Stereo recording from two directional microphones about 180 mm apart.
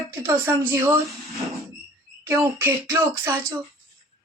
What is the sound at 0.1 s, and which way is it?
Speech, 10° right (ahead or behind).